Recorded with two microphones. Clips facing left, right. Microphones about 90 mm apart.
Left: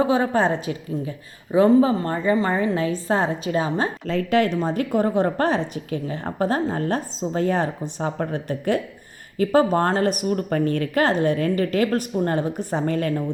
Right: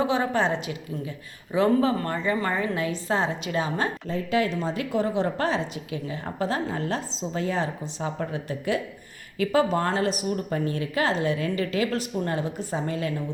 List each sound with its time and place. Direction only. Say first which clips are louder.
0.0 s a woman's voice: left 4 dB; 35° left (ahead or behind)
4.0 s a woman's voice: left 7 dB; 75° left (ahead or behind); by 13.2 s 50° left (ahead or behind)